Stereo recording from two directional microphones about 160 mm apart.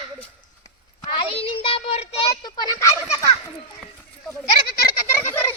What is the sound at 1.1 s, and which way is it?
Child singing, 35° left (ahead or behind).